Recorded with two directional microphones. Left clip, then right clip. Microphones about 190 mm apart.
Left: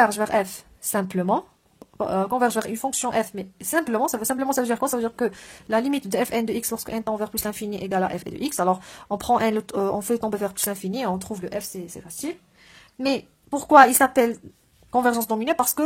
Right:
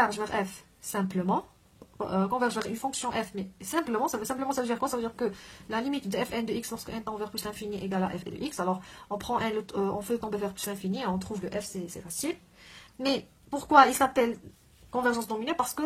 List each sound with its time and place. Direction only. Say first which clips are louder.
0.0 s speech: left 8 dB; 40° left (ahead or behind)
13.0 s a woman's voice: left 5 dB; 40° left (ahead or behind)